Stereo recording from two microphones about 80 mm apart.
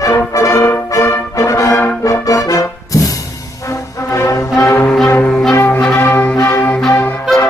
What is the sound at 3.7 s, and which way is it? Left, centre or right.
Music, left.